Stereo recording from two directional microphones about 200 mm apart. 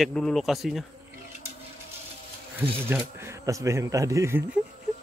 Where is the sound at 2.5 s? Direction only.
10° right (ahead or behind).